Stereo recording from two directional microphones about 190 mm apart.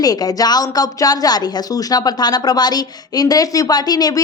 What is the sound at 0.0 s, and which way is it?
Speech, 20° left (ahead or behind).